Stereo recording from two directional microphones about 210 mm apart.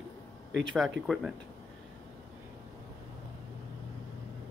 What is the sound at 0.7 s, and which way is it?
Speech, centre (ahead or behind).